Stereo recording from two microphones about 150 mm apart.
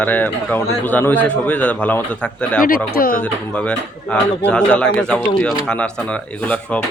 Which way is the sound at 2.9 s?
75° left (ahead or behind).